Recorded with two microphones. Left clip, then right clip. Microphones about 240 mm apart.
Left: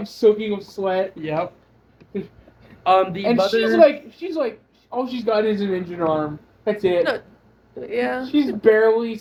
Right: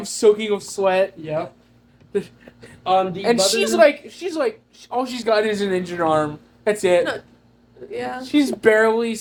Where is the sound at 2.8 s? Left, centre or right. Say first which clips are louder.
Left 2 dB; left.